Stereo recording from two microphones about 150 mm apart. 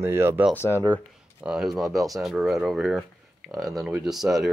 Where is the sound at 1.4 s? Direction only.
5° right (ahead or behind).